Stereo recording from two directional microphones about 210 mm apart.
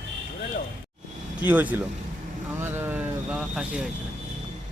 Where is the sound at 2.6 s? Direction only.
10° right (ahead or behind).